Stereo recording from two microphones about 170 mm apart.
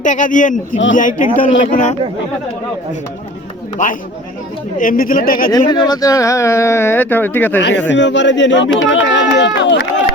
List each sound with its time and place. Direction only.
0.0 s speech: 50° left (ahead or behind)
3.8 s speech: 50° left (ahead or behind)
5.5 s speech: 25° left (ahead or behind)
7.6 s speech: 90° left